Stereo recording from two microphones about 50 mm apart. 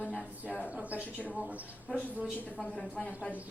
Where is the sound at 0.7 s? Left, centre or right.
Right.